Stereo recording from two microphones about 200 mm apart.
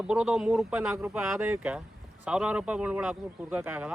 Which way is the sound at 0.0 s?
5° right (ahead or behind).